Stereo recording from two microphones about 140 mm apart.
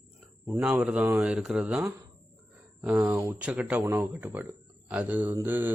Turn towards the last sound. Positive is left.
turn(degrees=-15)  # may be behind; listen again after turning